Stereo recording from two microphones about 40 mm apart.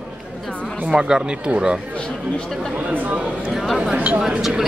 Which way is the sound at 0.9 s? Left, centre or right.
Centre.